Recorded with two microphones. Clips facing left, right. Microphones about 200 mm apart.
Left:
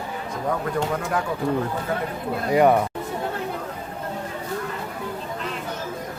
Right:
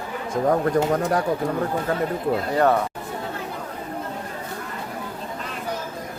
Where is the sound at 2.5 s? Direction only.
10° left (ahead or behind).